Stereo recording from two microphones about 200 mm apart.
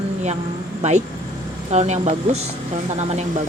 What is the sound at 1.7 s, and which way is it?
Speech, 35° right (ahead or behind).